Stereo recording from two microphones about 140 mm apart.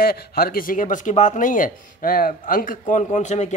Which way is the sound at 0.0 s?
90° left.